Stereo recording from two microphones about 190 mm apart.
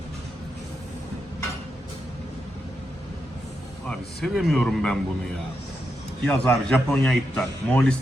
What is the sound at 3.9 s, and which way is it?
A man's voice, centre (ahead or behind).